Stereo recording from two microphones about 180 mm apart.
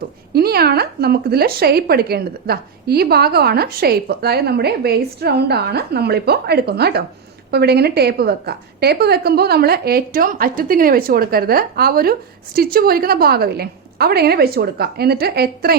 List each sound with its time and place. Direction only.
0.3 s a woman's voice: 60° right (ahead or behind)